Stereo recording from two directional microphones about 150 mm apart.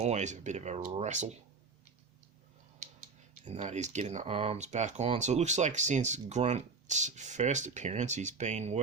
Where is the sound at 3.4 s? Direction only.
50° right (ahead or behind).